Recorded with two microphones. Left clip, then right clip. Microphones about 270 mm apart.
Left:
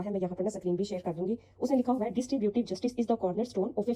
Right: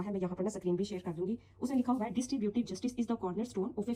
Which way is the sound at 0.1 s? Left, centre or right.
Centre.